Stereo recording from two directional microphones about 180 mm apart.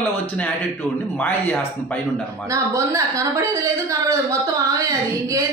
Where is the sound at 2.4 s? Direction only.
20° right (ahead or behind).